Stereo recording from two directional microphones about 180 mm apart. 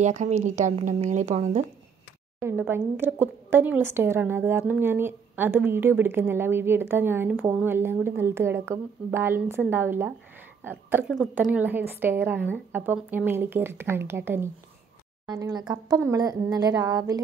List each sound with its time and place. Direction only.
0.0 s speech: 40° right (ahead or behind)
2.4 s a woman's voice: 10° right (ahead or behind)